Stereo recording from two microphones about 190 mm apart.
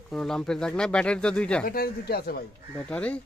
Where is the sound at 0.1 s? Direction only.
Centre (ahead or behind).